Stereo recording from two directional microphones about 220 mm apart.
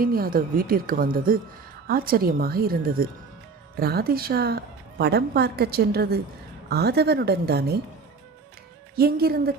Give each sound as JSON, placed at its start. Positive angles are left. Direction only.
{"t": 0.0, "sound": "a woman's voice", "side_deg": -40}
{"t": 9.0, "sound": "a woman's voice", "side_deg": -45}